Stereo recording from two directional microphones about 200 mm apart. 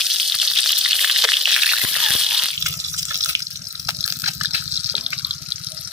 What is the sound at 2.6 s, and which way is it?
Water, 15° right (ahead or behind).